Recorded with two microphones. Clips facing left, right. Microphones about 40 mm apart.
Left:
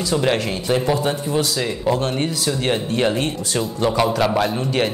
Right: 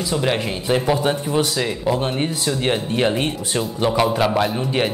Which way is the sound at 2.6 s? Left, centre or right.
Centre.